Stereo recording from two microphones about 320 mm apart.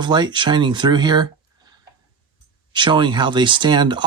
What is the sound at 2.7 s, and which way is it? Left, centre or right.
Speech, centre.